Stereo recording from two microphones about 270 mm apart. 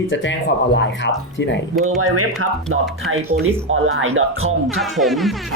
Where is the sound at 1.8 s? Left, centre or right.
Right.